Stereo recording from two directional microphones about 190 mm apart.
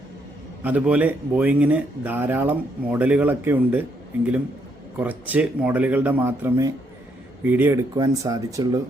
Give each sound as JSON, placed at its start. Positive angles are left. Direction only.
{"t": 0.6, "sound": "speech", "side_deg": -10}